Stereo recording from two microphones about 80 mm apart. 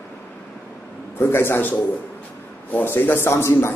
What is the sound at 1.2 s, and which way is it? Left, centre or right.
A man's voice, left.